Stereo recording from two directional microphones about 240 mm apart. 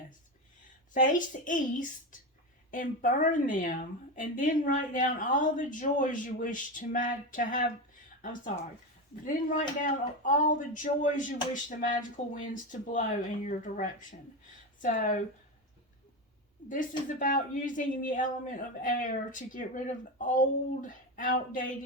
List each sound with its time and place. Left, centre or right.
0.9 s speech: left
16.6 s speech: left